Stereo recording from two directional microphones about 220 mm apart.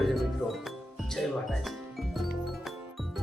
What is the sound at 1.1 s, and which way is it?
Music, centre (ahead or behind).